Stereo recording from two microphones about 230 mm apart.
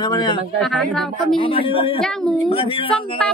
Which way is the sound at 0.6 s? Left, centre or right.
Centre.